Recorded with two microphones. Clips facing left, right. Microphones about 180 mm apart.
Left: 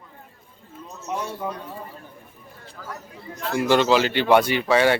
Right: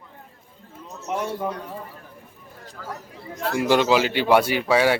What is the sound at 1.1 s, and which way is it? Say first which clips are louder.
Speech: right 3 dB; 15° right (ahead or behind).